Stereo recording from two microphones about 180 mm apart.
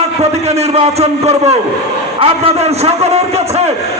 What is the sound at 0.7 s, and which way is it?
A man's voice, 35° right (ahead or behind).